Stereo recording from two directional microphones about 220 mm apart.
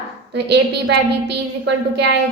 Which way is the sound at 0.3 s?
50° right (ahead or behind).